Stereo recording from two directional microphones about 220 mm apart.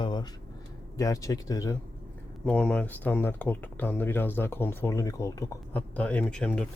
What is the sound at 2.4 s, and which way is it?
Speech, 5° left (ahead or behind).